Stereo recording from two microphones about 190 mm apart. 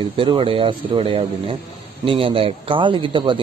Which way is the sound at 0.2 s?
25° right (ahead or behind).